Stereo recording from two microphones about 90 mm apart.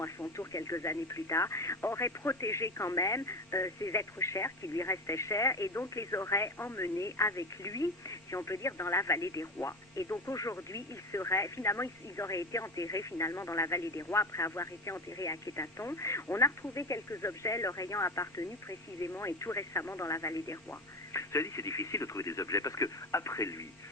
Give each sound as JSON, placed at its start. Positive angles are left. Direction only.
{"t": 0.0, "sound": "speech", "side_deg": 35}